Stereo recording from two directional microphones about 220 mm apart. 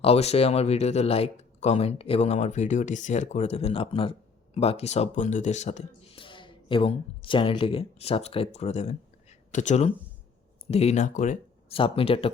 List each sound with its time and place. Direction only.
0.0 s speech: 30° left (ahead or behind)